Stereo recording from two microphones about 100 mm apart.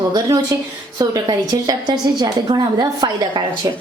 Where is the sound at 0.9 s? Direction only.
40° right (ahead or behind).